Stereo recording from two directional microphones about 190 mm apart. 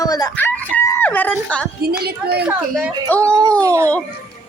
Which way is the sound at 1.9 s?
55° right (ahead or behind).